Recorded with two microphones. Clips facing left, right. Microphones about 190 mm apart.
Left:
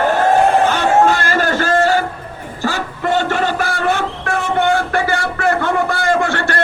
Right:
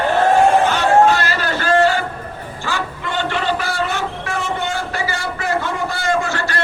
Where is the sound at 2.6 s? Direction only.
40° left (ahead or behind).